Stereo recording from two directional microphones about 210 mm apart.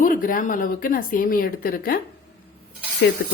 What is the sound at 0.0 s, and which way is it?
Speech, 40° left (ahead or behind).